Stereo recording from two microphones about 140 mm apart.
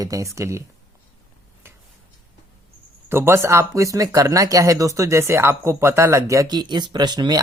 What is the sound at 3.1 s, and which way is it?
Speech, 15° right (ahead or behind).